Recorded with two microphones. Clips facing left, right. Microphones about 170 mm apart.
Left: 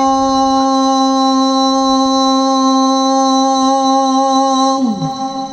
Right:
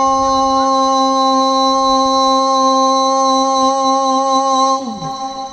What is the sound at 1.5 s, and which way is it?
Music, 10° right (ahead or behind).